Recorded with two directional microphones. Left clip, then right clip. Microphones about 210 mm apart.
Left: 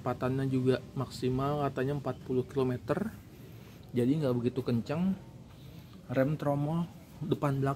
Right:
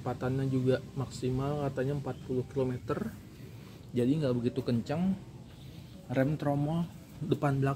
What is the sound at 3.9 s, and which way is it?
Speech, 15° left (ahead or behind).